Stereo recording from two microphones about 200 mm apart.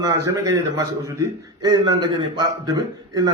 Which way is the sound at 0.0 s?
15° right (ahead or behind).